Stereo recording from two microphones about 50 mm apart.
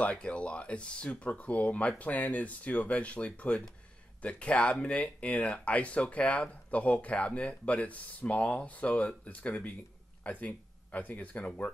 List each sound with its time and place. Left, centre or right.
0.0 s speech: left